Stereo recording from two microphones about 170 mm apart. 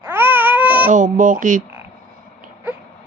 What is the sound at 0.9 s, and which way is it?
Speech, 50° right (ahead or behind).